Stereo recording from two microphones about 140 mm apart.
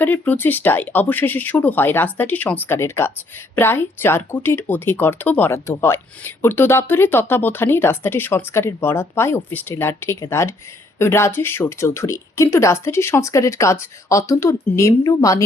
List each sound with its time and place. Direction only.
0.0 s speech: 15° left (ahead or behind)